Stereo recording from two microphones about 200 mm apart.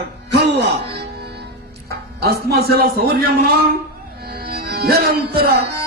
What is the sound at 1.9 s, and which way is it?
A man's voice, 55° right (ahead or behind).